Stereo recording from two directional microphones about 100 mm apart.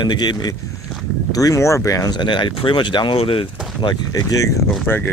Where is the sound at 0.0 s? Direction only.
45° left (ahead or behind).